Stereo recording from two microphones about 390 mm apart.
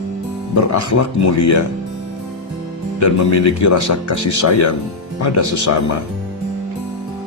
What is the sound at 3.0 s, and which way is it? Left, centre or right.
Speech, left.